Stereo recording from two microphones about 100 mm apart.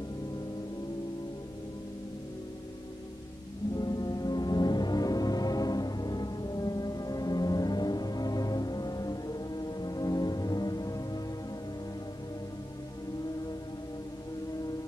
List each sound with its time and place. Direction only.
3.7 s music: 40° left (ahead or behind)